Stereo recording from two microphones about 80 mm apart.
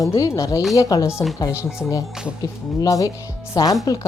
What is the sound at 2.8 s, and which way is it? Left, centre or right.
Speech, left.